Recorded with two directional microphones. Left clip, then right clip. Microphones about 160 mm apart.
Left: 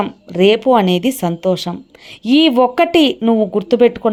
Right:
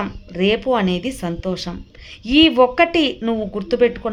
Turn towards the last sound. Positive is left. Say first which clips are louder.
# left 5 dB
turn(degrees=40)  # may be behind; listen again after turning